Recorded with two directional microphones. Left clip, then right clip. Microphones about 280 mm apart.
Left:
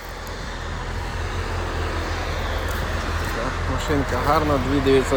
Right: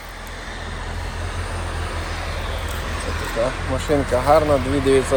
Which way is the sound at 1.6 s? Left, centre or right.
Left.